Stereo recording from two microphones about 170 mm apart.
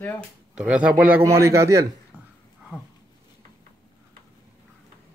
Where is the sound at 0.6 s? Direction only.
5° right (ahead or behind).